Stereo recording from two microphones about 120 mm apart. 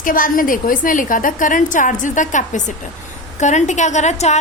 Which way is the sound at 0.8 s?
90° left.